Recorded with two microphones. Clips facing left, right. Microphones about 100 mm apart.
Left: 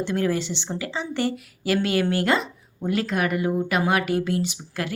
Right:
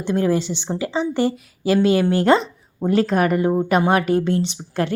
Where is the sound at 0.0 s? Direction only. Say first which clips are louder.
Right 4 dB; 20° right (ahead or behind).